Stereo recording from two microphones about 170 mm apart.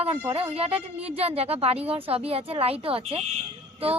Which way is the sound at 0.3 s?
35° right (ahead or behind).